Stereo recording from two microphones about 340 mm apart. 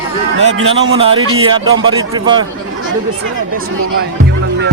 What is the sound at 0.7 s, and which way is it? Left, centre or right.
Speech, centre.